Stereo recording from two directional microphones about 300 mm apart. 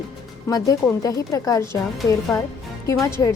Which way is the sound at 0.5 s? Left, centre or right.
Centre.